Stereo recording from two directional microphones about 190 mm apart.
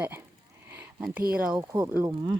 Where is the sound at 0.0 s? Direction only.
10° right (ahead or behind).